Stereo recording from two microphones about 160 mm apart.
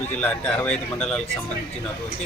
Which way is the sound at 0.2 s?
10° left (ahead or behind).